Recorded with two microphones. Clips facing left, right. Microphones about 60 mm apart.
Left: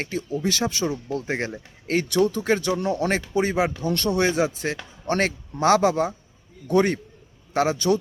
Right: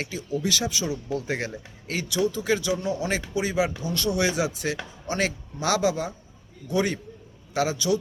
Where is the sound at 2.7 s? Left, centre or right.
Left.